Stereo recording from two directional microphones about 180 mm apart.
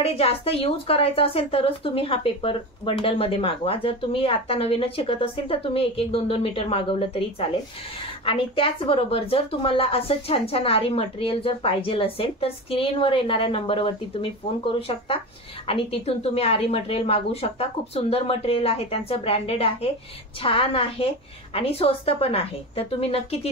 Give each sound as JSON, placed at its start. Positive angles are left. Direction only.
{"t": 0.0, "sound": "a woman's voice", "side_deg": 35}